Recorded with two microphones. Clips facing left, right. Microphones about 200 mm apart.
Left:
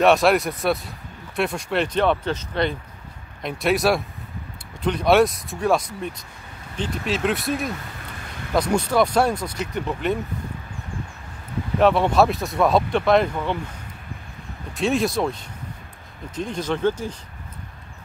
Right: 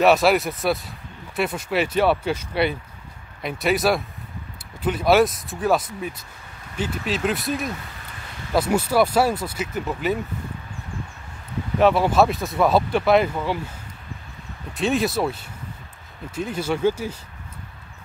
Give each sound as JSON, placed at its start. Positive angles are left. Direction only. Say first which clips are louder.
{"t": 0.0, "sound": "speech", "louder": "even", "side_deg": 0}
{"t": 11.8, "sound": "speech", "louder": "even", "side_deg": 0}
{"t": 14.7, "sound": "speech", "louder": "even", "side_deg": 0}